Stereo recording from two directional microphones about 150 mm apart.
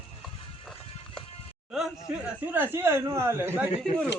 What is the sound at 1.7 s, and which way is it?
Speech, 5° right (ahead or behind).